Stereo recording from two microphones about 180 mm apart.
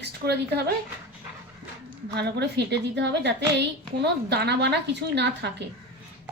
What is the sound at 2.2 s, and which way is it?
A woman's voice, 65° right (ahead or behind).